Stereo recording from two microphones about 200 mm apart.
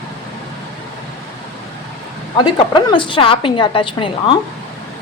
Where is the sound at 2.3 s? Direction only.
20° left (ahead or behind).